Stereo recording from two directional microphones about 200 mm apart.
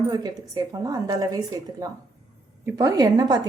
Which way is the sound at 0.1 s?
20° right (ahead or behind).